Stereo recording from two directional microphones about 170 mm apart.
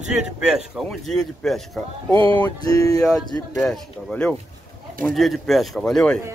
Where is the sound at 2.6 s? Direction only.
20° left (ahead or behind).